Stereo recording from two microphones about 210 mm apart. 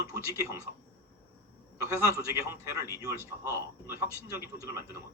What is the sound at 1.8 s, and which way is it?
Speech, 15° right (ahead or behind).